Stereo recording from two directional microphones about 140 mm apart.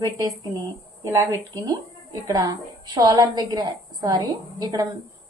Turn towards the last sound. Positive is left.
turn(degrees=-30)  # may be behind; listen again after turning